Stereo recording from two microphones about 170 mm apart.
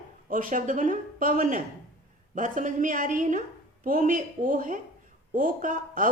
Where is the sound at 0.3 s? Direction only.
55° right (ahead or behind).